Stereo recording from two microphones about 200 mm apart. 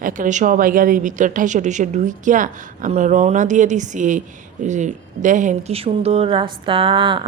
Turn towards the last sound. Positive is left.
turn(degrees=-25)  # may be behind; listen again after turning